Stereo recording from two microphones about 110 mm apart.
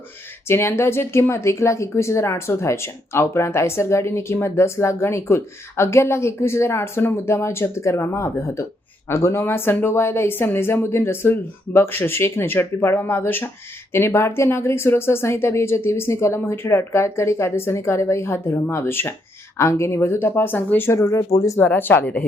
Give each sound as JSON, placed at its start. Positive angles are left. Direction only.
{"t": 0.4, "sound": "a woman's voice", "side_deg": 20}
{"t": 21.6, "sound": "speech", "side_deg": 20}